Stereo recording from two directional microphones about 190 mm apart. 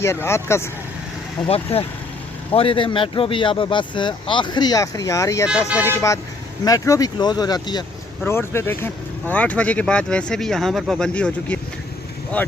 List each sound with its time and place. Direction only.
0.0 s speech: 15° left (ahead or behind)
1.5 s speech: 30° left (ahead or behind); by 5.5 s 15° left (ahead or behind)
6.7 s speech: 20° left (ahead or behind)